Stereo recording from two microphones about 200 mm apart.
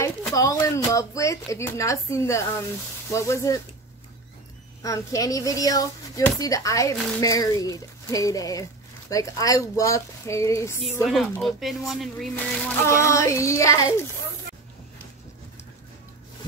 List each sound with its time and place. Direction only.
0.0 s speech: 15° left (ahead or behind)
4.8 s speech: 15° left (ahead or behind)
11.3 s speech: centre (ahead or behind)
12.8 s speech: 15° left (ahead or behind)